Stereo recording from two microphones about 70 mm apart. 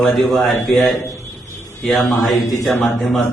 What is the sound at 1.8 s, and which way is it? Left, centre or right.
Speech, centre.